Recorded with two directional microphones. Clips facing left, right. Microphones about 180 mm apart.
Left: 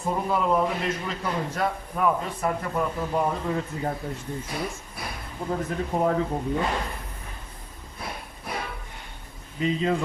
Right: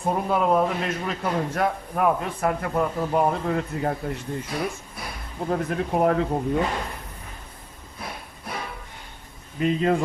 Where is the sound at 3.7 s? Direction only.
75° right (ahead or behind).